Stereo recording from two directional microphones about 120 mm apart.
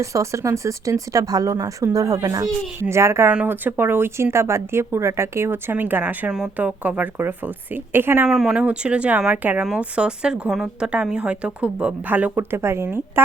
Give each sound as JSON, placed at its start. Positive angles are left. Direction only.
{"t": 0.0, "sound": "speech", "side_deg": -25}
{"t": 2.9, "sound": "speech", "side_deg": -20}
{"t": 8.3, "sound": "speech", "side_deg": -5}